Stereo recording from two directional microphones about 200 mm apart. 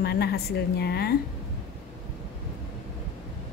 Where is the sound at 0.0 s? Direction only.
55° left (ahead or behind).